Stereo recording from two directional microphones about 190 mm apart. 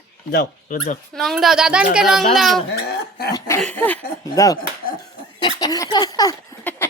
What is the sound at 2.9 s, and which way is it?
Cough, 55° left (ahead or behind).